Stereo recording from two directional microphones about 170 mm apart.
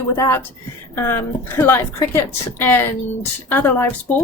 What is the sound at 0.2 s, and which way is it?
A woman's voice, 15° left (ahead or behind).